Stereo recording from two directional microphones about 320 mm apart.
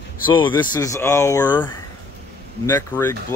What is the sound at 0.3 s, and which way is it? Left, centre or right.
Speech, centre.